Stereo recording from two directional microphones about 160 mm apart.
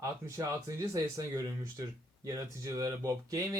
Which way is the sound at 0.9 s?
20° right (ahead or behind).